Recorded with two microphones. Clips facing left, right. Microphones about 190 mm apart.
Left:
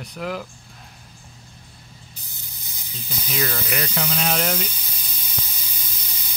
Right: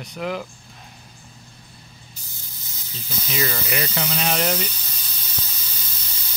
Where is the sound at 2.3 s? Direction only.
15° left (ahead or behind).